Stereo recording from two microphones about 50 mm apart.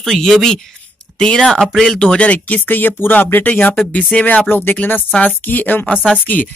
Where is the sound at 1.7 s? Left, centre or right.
Centre.